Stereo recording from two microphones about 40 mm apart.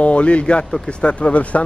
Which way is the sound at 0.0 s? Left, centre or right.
Left.